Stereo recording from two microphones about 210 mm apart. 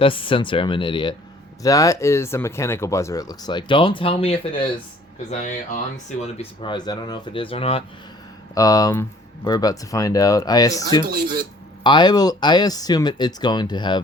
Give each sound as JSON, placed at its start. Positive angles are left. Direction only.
{"t": 0.0, "sound": "speech", "side_deg": 25}
{"t": 8.5, "sound": "speech", "side_deg": 15}